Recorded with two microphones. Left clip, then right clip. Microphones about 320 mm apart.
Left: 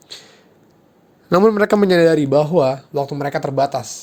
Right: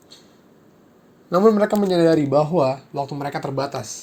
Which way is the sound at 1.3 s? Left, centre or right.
Left.